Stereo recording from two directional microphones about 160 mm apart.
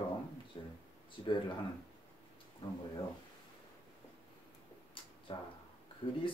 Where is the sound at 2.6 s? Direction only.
30° left (ahead or behind).